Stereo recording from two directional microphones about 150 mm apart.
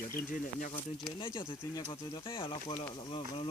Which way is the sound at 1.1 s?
35° left (ahead or behind).